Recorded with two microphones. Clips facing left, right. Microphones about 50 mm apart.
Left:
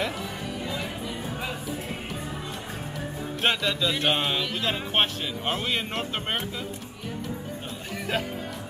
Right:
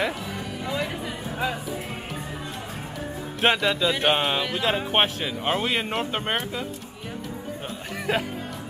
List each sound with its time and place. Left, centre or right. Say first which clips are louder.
0.7 s music: right 3 dB; right
3.3 s speech: right 4 dB; centre
8.1 s speech: right 4 dB; centre